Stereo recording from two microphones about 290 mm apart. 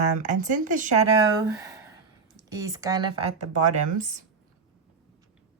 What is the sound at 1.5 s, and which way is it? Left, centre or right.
Speech, centre.